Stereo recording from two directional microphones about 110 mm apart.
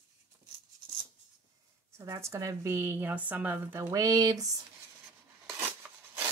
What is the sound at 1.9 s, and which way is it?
Speech, 25° right (ahead or behind).